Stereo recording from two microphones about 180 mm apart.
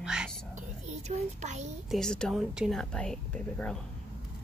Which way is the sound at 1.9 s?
5° left (ahead or behind).